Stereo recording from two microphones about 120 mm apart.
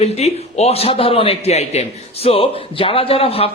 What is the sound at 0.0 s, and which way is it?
A man's voice, 60° left (ahead or behind).